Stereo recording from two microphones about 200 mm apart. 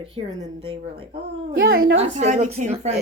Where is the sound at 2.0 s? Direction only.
35° right (ahead or behind).